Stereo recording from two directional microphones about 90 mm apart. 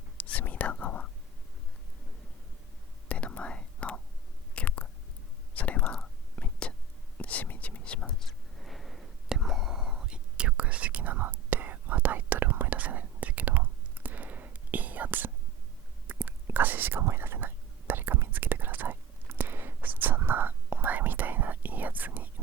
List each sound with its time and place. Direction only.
0.3 s whispering: 20° left (ahead or behind)
3.1 s whispering: 15° left (ahead or behind)
4.5 s chewing: 15° left (ahead or behind)
5.5 s whispering: 20° left (ahead or behind); by 22.3 s 20° right (ahead or behind)